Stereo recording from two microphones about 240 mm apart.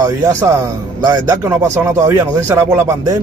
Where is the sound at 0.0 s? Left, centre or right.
Centre.